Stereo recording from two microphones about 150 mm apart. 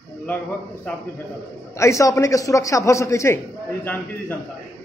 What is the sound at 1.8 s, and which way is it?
A man's voice, 20° left (ahead or behind).